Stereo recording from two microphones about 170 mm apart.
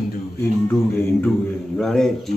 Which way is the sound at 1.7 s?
Centre (ahead or behind).